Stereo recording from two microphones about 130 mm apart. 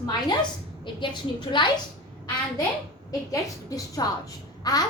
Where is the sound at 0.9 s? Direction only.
35° left (ahead or behind).